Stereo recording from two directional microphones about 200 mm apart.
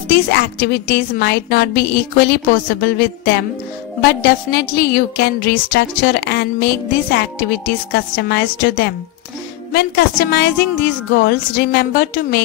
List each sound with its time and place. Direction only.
0.1 s a woman's voice: 50° left (ahead or behind)